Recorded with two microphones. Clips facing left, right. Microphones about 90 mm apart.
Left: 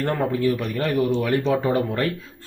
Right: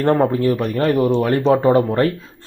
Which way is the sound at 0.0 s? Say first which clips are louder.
Right 6 dB; 35° right (ahead or behind).